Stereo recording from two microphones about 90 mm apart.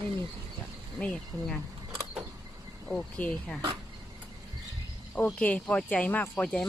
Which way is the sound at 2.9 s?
10° left (ahead or behind).